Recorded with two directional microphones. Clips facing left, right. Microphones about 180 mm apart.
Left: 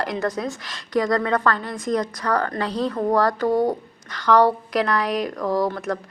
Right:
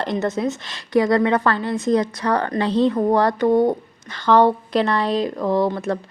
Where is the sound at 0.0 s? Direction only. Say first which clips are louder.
Right 3 dB; 25° right (ahead or behind).